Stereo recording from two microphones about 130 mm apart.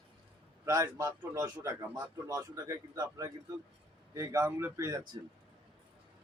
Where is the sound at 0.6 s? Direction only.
25° right (ahead or behind).